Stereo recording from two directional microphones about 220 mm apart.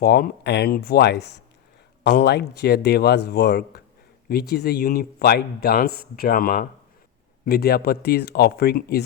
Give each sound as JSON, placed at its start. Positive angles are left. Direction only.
{"t": 0.0, "sound": "a man's voice", "side_deg": 45}